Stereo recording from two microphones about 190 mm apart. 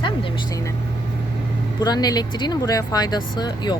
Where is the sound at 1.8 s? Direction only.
20° left (ahead or behind).